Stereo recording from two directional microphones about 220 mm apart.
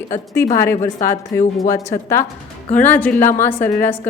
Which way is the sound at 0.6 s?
10° left (ahead or behind).